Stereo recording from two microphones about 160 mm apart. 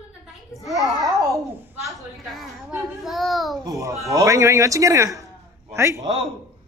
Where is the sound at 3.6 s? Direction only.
20° right (ahead or behind).